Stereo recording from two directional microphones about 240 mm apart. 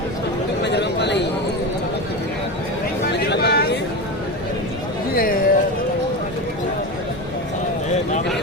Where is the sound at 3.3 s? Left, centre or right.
Left.